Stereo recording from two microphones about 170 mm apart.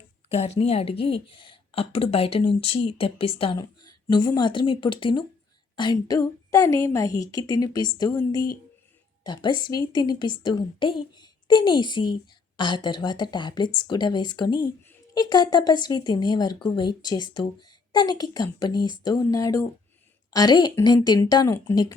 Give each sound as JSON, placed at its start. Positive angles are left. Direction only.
{"t": 0.3, "sound": "a woman's voice", "side_deg": 35}